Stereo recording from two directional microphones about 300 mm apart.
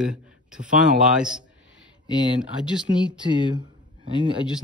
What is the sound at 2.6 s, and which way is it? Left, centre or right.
Speech, centre.